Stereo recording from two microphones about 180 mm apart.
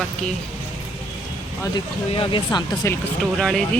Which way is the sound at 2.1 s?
30° left (ahead or behind).